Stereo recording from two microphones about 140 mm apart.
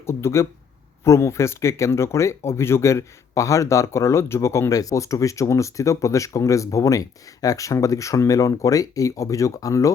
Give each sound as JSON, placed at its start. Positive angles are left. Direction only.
{"t": 0.0, "sound": "speech", "side_deg": 20}